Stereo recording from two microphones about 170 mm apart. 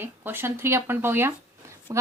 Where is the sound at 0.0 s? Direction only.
15° right (ahead or behind).